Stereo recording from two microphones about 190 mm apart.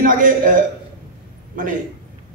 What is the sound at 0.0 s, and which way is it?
A woman's voice, 45° right (ahead or behind).